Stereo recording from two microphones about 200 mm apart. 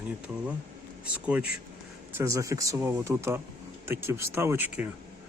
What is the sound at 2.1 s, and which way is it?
Speech, 15° right (ahead or behind).